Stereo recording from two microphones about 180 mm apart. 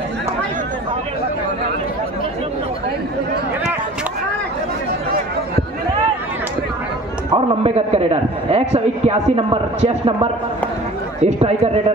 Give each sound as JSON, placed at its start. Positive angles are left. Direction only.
{"t": 7.3, "sound": "a man's voice", "side_deg": -35}
{"t": 11.2, "sound": "a man's voice", "side_deg": -35}